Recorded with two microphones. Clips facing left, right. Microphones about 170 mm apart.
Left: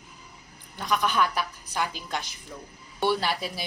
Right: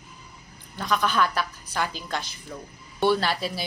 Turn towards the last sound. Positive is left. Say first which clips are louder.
# right 3 dB
turn(degrees=15)  # may be behind; listen again after turning